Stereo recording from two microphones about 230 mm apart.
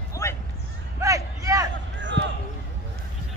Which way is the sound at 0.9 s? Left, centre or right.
Centre.